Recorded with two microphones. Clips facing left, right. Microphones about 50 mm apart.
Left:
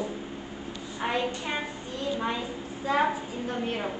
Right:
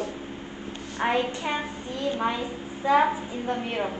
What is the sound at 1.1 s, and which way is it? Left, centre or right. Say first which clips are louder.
Speech: right 3 dB; right.